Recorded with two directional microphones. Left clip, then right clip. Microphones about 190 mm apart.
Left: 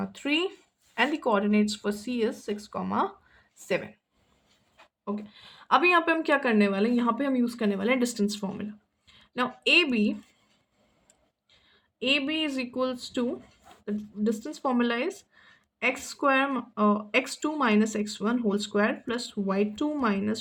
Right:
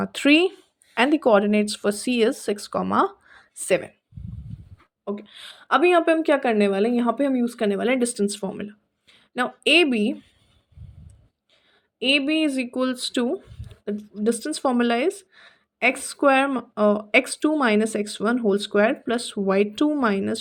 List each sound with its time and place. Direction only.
0.0 s speech: 40° right (ahead or behind)
5.0 s a woman's voice: 30° right (ahead or behind)
11.9 s speech: 35° right (ahead or behind)